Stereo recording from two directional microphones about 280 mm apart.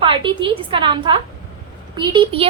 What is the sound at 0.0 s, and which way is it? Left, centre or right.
A woman's voice, centre.